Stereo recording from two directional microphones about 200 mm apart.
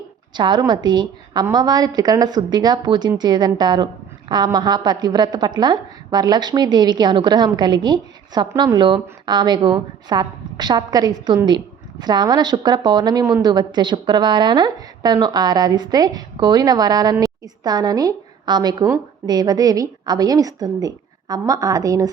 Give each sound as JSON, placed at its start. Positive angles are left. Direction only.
{"t": 0.3, "sound": "a woman's voice", "side_deg": -20}